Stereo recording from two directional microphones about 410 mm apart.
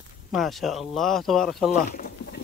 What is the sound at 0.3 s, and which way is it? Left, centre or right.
Speech, centre.